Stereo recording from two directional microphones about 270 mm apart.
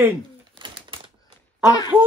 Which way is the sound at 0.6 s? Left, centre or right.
Centre.